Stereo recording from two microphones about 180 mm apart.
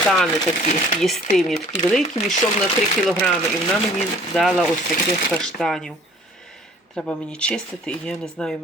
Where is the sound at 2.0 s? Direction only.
40° left (ahead or behind).